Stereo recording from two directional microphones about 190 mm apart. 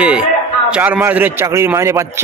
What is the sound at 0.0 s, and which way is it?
Speech, 5° right (ahead or behind).